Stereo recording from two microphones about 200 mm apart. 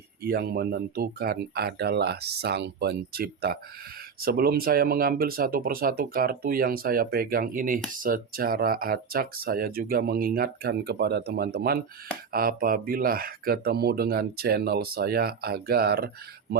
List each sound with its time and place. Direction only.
0.2 s speech: 50° right (ahead or behind)